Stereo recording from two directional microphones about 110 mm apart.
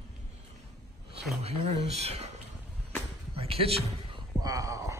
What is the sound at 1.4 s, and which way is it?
Speech, 70° right (ahead or behind).